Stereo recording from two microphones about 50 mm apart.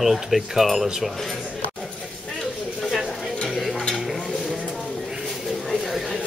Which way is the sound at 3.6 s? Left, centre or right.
Centre.